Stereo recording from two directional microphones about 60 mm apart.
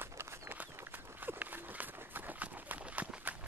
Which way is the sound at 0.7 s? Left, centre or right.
Right.